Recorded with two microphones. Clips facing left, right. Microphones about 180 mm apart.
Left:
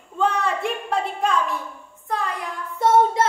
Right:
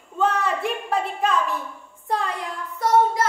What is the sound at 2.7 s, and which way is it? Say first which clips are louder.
Child singing: left 2 dB; 25° left (ahead or behind).